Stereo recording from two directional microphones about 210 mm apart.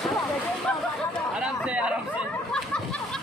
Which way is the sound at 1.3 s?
5° right (ahead or behind).